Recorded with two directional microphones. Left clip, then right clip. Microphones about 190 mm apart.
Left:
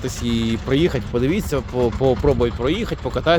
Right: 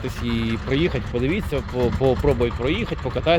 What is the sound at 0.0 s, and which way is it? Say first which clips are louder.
Speech: left 3 dB; 30° left (ahead or behind).